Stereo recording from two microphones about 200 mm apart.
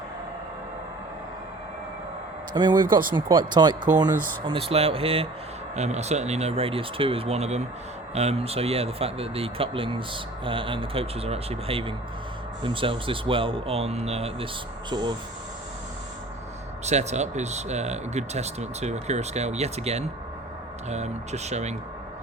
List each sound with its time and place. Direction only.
2.5 s speech: 20° right (ahead or behind)
2.7 s speech: 45° right (ahead or behind)
3.2 s speech: 20° right (ahead or behind)
16.8 s speech: 35° right (ahead or behind)